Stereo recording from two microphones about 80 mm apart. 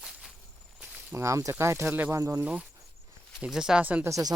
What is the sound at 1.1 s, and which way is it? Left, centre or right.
Speech, right.